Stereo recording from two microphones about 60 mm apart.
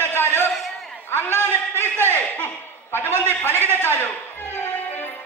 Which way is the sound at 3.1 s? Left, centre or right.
Right.